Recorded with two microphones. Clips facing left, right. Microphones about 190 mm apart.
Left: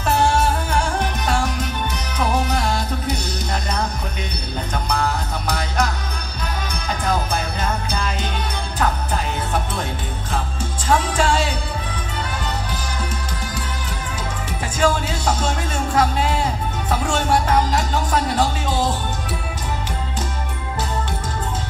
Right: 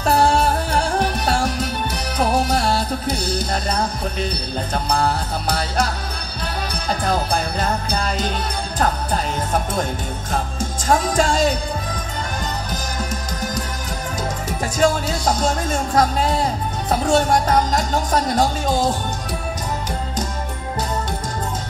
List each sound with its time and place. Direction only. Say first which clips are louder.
0.0 s music: right 2 dB; 35° right (ahead or behind)
4.8 s music: right 2 dB; 35° right (ahead or behind)
6.7 s music: right 2 dB; 35° right (ahead or behind)
7.6 s jingle bell: right 2 dB; 40° right (ahead or behind)
8.7 s music: right 1 dB; 40° right (ahead or behind)
14.8 s music: right 1 dB; 40° right (ahead or behind)